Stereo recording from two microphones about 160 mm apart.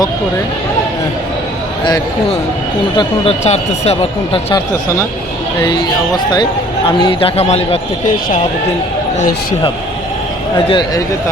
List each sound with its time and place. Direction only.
1.8 s speech: 30° left (ahead or behind)
3.4 s speech: 45° left (ahead or behind)
5.6 s speech: 25° left (ahead or behind)
10.7 s speech: 30° left (ahead or behind)